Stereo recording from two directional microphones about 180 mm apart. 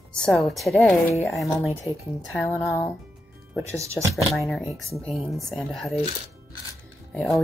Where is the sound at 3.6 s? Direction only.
15° right (ahead or behind).